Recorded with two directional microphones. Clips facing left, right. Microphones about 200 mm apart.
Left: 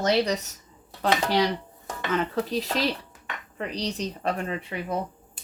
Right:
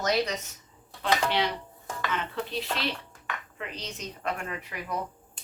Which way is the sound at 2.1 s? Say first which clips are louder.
Left 7 dB; 40° left (ahead or behind).